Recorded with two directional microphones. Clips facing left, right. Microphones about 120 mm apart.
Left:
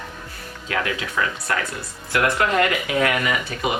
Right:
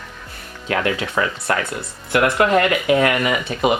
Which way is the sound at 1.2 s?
40° right (ahead or behind).